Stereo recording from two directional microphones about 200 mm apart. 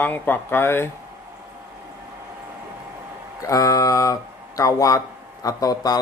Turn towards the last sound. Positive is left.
turn(degrees=20)  # may be behind; listen again after turning